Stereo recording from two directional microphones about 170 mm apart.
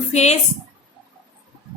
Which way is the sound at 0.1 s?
40° left (ahead or behind).